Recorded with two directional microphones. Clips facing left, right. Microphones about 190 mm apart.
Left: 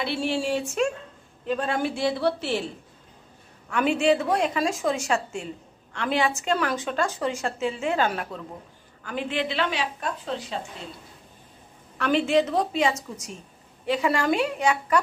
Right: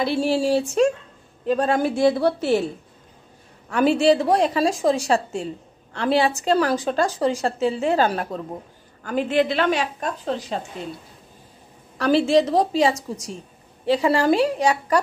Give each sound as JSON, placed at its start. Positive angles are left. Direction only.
{"t": 0.0, "sound": "a woman's voice", "side_deg": -40}
{"t": 3.6, "sound": "a woman's voice", "side_deg": -35}
{"t": 12.0, "sound": "a woman's voice", "side_deg": -35}